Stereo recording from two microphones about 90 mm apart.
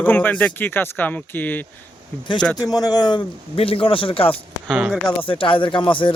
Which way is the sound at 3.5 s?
90° left.